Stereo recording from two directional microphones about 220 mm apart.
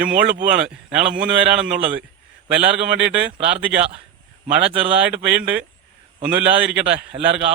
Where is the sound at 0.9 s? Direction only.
5° right (ahead or behind).